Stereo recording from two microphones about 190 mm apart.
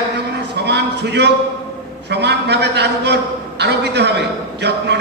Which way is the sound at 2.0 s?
60° right (ahead or behind).